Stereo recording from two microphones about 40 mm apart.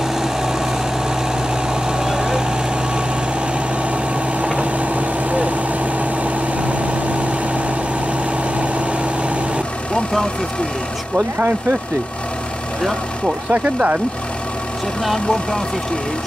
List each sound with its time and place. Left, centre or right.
1.9 s vehicle: centre
4.4 s vehicle: right
13.5 s speech: right